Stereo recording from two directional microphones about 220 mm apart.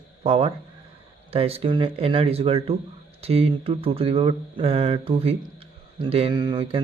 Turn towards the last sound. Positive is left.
turn(degrees=-20)  # may be behind; listen again after turning